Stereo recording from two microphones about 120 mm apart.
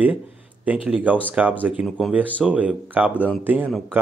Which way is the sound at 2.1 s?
10° right (ahead or behind).